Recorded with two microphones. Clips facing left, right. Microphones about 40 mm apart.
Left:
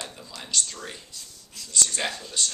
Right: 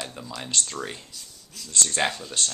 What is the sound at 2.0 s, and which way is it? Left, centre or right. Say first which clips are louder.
Speech: right 7 dB; right.